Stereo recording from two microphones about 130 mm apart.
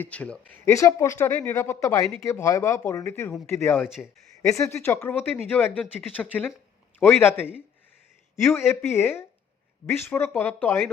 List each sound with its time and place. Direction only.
0.0 s speech: 10° left (ahead or behind)
3.8 s speech: 5° right (ahead or behind)
4.5 s speech: 20° left (ahead or behind)